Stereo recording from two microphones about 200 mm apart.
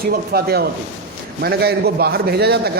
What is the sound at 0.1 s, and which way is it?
A man's voice, 50° right (ahead or behind).